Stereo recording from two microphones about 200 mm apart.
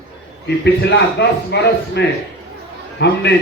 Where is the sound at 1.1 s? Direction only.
60° left (ahead or behind).